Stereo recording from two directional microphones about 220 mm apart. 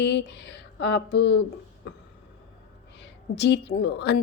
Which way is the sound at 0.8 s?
50° left (ahead or behind).